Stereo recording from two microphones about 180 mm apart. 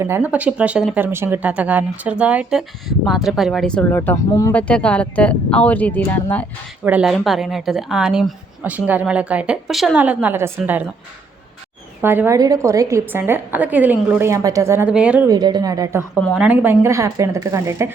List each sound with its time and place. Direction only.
0.0 s a woman's voice: 10° right (ahead or behind); by 6.4 s 10° left (ahead or behind)
6.8 s a woman's voice: 5° right (ahead or behind)
12.0 s a woman's voice: 10° right (ahead or behind)
15.3 s a woman's voice: 25° right (ahead or behind)